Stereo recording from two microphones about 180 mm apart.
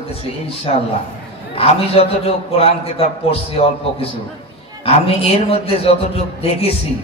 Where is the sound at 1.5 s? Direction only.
30° left (ahead or behind).